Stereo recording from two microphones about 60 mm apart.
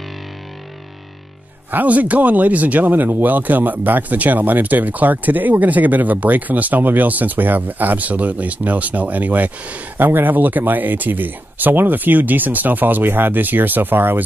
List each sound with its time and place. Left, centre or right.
1.7 s speech: right